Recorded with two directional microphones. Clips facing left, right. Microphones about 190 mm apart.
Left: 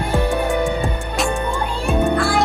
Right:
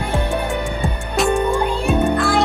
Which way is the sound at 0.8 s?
Centre (ahead or behind).